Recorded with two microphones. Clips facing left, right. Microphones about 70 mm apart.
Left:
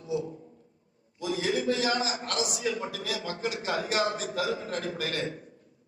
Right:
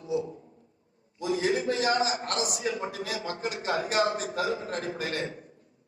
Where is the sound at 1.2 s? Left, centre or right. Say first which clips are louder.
Right 2 dB; right.